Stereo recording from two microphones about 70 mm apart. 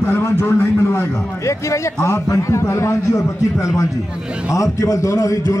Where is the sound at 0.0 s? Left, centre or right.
Left.